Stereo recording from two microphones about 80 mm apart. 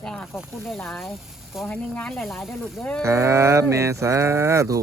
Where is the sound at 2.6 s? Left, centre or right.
Centre.